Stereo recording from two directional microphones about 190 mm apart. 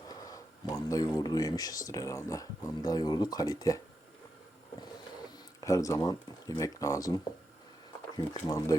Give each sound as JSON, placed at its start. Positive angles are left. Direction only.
{"t": 0.1, "sound": "speech", "side_deg": 20}
{"t": 5.5, "sound": "speech", "side_deg": 15}